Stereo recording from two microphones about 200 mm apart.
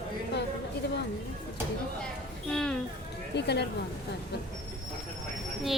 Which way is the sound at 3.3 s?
55° left (ahead or behind).